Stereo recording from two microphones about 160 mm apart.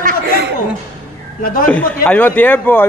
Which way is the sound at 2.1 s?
10° left (ahead or behind).